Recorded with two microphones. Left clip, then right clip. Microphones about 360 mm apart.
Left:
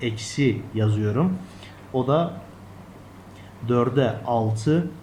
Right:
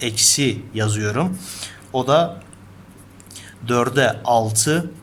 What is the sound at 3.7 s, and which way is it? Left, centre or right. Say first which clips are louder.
A man's voice: right 4 dB; right.